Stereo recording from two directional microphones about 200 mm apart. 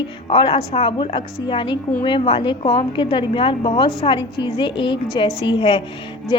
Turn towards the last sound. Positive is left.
turn(degrees=25)  # may be behind; listen again after turning